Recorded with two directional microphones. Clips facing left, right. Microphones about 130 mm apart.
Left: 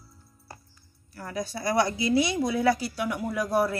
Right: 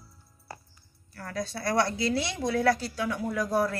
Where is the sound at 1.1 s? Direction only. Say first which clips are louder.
Left 1 dB; 15° left (ahead or behind).